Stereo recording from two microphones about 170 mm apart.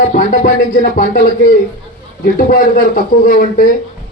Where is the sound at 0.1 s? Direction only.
50° left (ahead or behind).